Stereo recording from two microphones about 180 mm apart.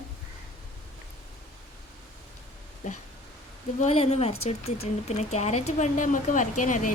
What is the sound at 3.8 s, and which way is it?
A woman's voice, 35° left (ahead or behind).